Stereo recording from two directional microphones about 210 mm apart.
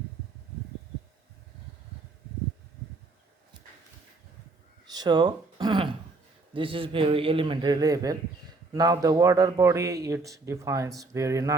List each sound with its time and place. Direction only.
4.9 s a man's voice: 20° right (ahead or behind)